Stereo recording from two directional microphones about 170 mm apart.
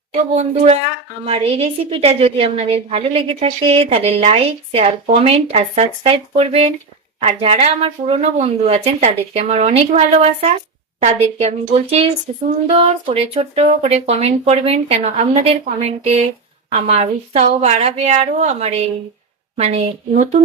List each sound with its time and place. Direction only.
0.1 s a woman's voice: 40° right (ahead or behind)